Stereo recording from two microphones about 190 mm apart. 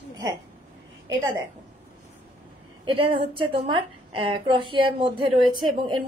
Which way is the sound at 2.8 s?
30° right (ahead or behind).